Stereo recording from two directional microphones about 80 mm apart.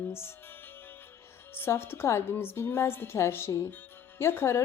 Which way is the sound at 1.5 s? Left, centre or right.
Left.